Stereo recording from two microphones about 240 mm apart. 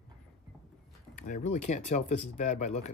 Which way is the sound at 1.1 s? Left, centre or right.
Left.